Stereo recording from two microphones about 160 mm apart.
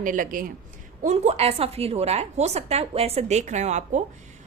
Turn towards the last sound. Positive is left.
turn(degrees=-45)  # may be behind; listen again after turning